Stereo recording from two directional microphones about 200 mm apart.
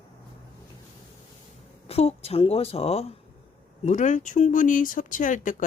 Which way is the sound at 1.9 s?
30° left (ahead or behind).